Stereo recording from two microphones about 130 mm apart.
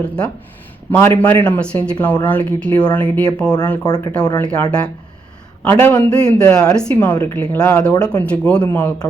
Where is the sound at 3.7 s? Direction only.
30° left (ahead or behind).